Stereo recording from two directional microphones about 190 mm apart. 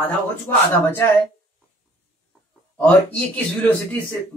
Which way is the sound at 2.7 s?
5° left (ahead or behind).